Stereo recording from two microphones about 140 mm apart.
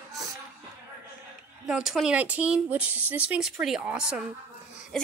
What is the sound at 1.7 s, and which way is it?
A woman's voice, 5° right (ahead or behind).